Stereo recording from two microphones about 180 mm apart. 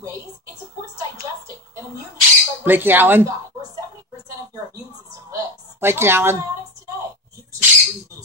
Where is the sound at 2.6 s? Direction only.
10° right (ahead or behind).